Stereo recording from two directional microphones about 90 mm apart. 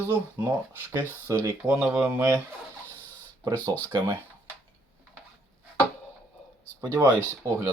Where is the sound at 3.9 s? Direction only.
45° right (ahead or behind).